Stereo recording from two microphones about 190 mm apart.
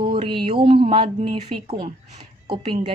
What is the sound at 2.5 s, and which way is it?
Speech, 30° right (ahead or behind).